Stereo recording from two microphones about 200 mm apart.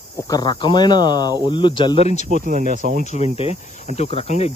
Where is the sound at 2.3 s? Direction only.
40° right (ahead or behind).